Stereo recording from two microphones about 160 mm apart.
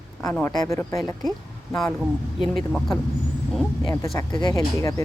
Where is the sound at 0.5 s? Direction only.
20° left (ahead or behind).